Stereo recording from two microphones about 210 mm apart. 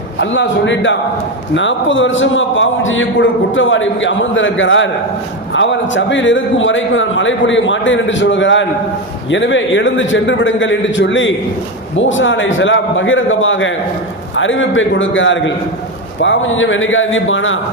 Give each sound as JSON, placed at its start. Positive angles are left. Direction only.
{"t": 0.2, "sound": "a man's voice", "side_deg": 60}